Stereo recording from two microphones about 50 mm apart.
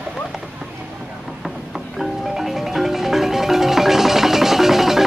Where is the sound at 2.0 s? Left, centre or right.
Centre.